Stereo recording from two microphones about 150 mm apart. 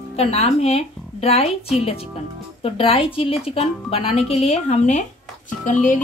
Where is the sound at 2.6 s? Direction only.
40° left (ahead or behind).